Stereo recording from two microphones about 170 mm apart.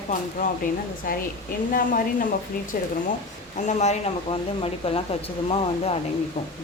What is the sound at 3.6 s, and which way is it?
Speech, 45° left (ahead or behind).